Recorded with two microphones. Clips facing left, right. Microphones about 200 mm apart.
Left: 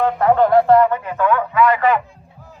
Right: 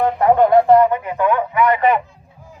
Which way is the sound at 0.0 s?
15° right (ahead or behind).